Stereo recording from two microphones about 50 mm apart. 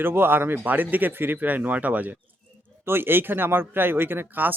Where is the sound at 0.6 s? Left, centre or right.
Right.